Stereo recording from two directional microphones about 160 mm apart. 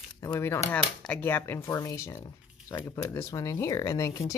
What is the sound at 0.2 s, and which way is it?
Speech, 15° left (ahead or behind).